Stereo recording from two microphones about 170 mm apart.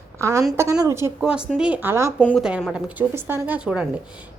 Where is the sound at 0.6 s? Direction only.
20° right (ahead or behind).